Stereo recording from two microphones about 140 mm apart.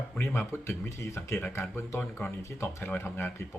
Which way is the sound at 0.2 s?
15° left (ahead or behind).